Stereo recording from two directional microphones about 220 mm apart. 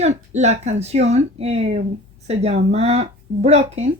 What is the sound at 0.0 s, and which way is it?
Speech, 30° right (ahead or behind).